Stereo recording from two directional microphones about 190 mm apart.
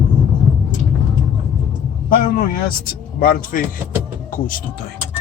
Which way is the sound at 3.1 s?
50° left (ahead or behind).